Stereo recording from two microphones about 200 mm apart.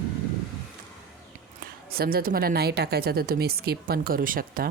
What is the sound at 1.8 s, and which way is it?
Speech, 50° right (ahead or behind).